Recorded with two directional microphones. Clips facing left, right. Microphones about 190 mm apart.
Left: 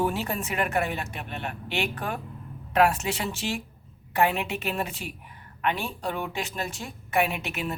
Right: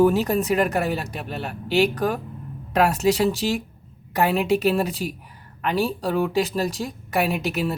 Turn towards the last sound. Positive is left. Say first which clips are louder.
# right 7 dB
turn(degrees=-40)  # may be behind; listen again after turning